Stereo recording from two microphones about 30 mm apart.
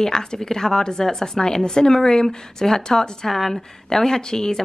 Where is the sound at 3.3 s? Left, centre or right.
Centre.